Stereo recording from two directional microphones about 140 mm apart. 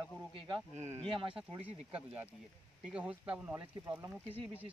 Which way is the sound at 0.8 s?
55° right (ahead or behind).